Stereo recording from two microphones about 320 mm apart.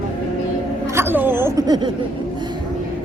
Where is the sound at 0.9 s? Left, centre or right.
Centre.